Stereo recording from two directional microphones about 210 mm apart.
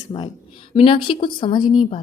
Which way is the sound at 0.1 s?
20° left (ahead or behind).